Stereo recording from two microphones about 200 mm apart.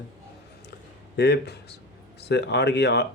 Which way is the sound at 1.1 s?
55° left (ahead or behind).